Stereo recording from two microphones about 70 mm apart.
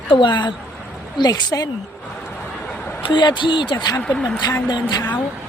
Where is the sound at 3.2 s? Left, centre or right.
Left.